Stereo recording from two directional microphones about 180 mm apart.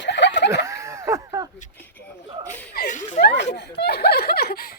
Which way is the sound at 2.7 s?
50° left (ahead or behind).